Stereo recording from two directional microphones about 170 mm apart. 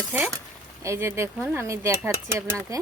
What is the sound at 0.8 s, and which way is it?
Speech, 15° right (ahead or behind).